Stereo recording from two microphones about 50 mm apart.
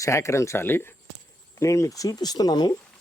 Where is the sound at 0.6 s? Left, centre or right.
Left.